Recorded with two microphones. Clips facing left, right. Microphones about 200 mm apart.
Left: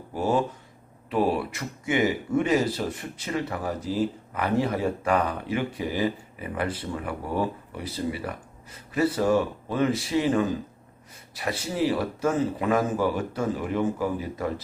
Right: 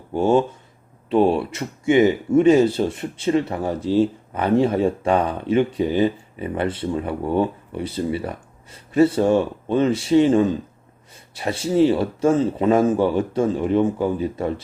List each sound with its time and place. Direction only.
0.1 s speech: 25° right (ahead or behind)